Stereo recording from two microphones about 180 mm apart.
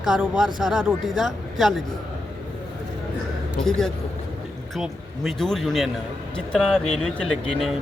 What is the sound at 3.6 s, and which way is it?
Speech, 5° left (ahead or behind).